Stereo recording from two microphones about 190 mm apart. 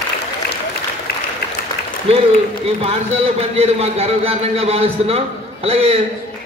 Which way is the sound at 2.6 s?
30° right (ahead or behind).